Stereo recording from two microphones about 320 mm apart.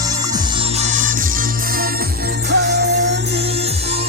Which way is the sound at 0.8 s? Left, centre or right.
Right.